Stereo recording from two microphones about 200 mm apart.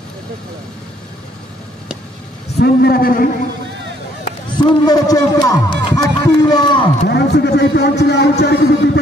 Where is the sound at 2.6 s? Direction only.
50° left (ahead or behind).